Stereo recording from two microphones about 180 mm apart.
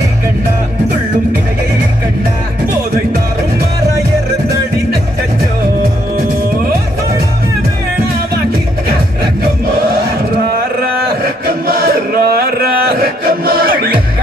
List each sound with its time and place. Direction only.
11.4 s chant: 55° right (ahead or behind)
13.2 s music: 55° right (ahead or behind)